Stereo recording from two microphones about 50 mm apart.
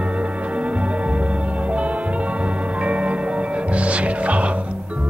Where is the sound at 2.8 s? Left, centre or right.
Right.